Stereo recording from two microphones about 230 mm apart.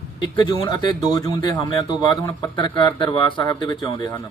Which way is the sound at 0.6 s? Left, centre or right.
Centre.